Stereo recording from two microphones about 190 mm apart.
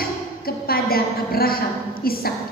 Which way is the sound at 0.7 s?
50° left (ahead or behind).